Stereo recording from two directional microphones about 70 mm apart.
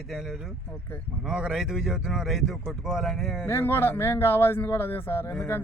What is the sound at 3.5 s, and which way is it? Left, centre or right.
Speech, left.